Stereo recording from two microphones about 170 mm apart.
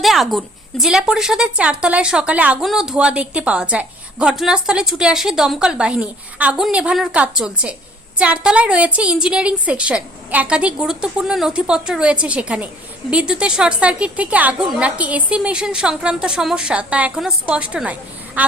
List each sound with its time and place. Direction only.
0.0 s a woman's voice: centre (ahead or behind)